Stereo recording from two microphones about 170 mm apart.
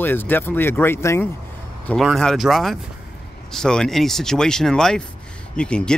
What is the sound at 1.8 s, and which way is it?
Speech, centre (ahead or behind).